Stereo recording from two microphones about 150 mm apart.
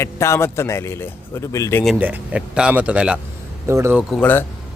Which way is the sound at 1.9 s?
10° right (ahead or behind).